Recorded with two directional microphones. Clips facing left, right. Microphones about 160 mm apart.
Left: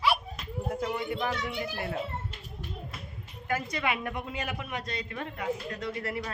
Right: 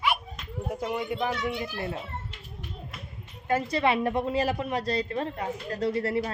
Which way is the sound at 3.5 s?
30° right (ahead or behind).